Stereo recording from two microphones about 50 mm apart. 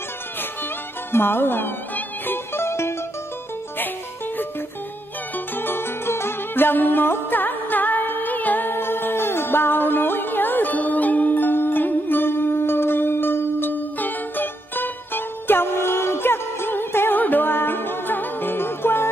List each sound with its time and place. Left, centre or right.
1.1 s music: left
5.6 s music: left